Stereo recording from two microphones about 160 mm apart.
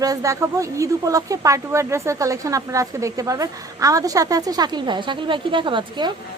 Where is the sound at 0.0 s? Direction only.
20° right (ahead or behind).